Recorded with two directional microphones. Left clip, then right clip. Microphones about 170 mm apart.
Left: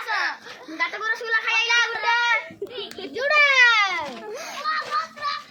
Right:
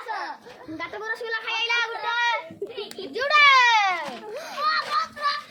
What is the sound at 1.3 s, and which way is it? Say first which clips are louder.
Child singing: left 5 dB; 35° right (ahead or behind).